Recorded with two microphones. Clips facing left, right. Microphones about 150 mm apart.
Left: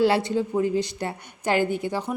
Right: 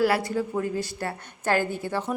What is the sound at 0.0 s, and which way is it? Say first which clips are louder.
A woman's voice: left 2 dB; 25° left (ahead or behind).